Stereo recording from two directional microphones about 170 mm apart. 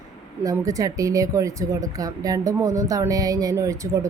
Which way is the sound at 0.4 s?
20° right (ahead or behind).